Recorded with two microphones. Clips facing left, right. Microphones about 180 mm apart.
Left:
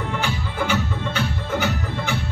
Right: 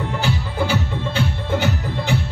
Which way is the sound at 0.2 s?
30° right (ahead or behind).